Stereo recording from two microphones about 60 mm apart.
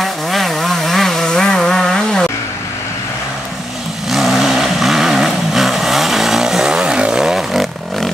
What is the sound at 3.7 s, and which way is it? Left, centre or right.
Vehicle, centre.